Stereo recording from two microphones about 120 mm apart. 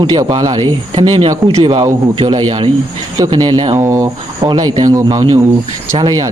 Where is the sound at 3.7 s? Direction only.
25° right (ahead or behind).